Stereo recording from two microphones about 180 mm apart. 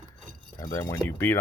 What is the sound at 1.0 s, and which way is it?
Speech, 15° left (ahead or behind).